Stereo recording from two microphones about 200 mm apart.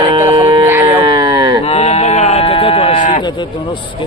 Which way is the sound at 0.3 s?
20° right (ahead or behind).